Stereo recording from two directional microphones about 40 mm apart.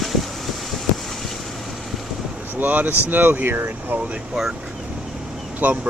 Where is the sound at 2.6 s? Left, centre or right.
Right.